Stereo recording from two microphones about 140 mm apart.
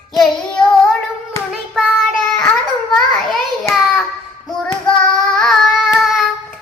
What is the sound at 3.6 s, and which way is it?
Child singing, centre (ahead or behind).